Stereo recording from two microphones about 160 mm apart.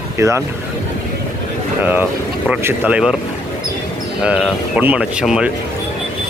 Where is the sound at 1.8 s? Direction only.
10° right (ahead or behind).